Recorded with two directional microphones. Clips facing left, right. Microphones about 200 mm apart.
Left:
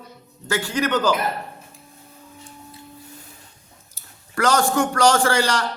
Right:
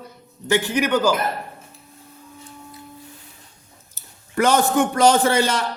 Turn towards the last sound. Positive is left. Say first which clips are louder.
# right 1 dB
turn(degrees=-20)  # may be behind; listen again after turning